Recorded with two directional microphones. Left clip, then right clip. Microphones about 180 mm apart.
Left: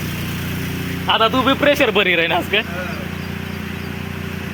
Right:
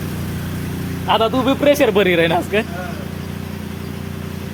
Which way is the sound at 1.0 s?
30° right (ahead or behind).